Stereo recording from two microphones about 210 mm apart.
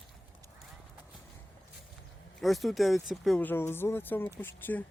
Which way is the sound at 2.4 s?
Centre (ahead or behind).